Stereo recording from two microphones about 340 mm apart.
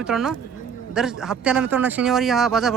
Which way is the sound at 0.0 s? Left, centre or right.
Centre.